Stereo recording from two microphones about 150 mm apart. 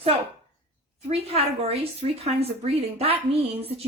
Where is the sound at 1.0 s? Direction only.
40° right (ahead or behind).